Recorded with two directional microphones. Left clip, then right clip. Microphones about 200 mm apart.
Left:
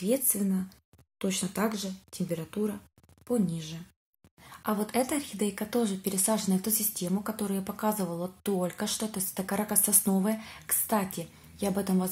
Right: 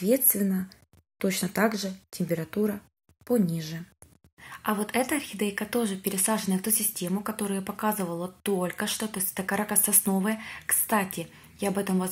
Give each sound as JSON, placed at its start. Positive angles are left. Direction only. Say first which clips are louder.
{"t": 0.3, "sound": "speech", "louder": "right 3 dB", "side_deg": -15}
{"t": 4.4, "sound": "a woman's voice", "louder": "right 2 dB", "side_deg": 0}